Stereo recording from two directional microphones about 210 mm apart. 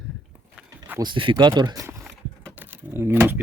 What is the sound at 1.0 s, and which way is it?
Speech, 25° right (ahead or behind).